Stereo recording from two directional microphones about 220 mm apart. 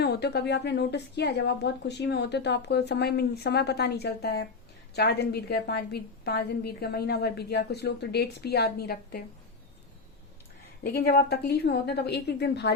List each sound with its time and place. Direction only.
0.0 s a woman's voice: 50° left (ahead or behind)
10.8 s a woman's voice: 40° left (ahead or behind)